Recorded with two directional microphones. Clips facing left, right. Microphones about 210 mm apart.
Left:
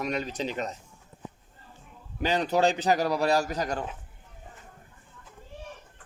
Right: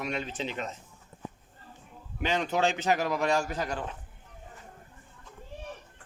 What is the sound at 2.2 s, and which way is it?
A man's voice, 35° left (ahead or behind).